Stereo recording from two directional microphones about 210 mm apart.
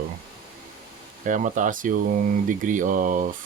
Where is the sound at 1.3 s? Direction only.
35° right (ahead or behind).